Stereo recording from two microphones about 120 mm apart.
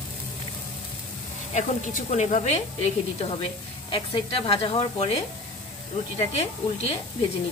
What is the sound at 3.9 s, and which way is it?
Speech, 50° left (ahead or behind).